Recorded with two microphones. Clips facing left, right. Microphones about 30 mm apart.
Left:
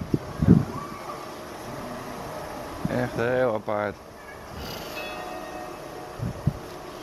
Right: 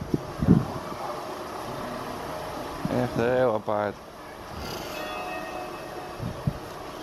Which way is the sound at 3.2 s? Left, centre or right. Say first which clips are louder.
Right 1 dB; centre.